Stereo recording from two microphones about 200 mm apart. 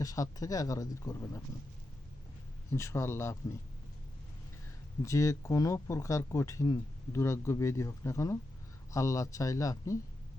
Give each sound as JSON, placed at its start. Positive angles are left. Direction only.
{"t": 0.0, "sound": "speech", "side_deg": 15}
{"t": 2.7, "sound": "speech", "side_deg": 15}
{"t": 5.0, "sound": "speech", "side_deg": 15}